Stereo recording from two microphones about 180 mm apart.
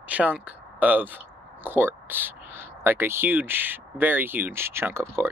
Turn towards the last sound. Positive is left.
turn(degrees=-15)  # may be behind; listen again after turning